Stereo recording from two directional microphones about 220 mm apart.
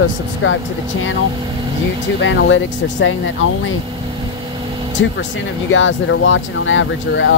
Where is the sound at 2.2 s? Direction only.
55° left (ahead or behind).